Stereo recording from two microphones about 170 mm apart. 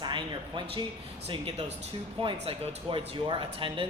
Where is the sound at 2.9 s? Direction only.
30° right (ahead or behind).